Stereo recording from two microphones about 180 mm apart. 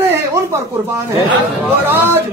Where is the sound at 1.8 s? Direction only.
10° right (ahead or behind).